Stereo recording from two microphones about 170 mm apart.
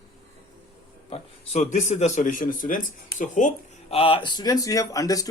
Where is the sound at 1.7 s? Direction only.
45° left (ahead or behind).